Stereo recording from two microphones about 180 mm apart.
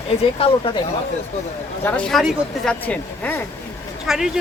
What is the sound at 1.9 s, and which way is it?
Speech, 5° left (ahead or behind).